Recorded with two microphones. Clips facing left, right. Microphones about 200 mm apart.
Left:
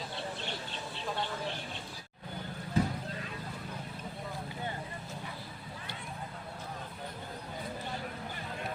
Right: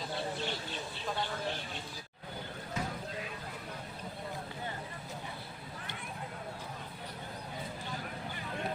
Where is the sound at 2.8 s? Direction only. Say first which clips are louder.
Left 8 dB; 30° left (ahead or behind).